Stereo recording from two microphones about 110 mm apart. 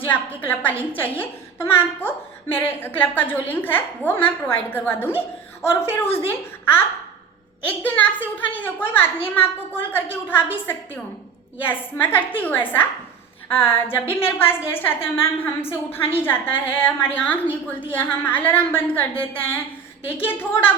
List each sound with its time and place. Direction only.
0.4 s a child's voice: 15° left (ahead or behind)
20.1 s a woman's voice: 20° left (ahead or behind)